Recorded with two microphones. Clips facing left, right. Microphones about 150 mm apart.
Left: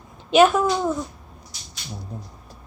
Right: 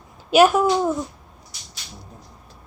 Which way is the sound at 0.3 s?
5° right (ahead or behind).